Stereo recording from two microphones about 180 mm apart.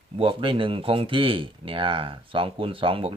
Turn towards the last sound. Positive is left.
turn(degrees=-30)  # may be behind; listen again after turning